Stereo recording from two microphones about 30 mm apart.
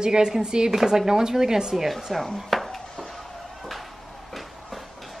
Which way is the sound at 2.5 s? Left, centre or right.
Centre.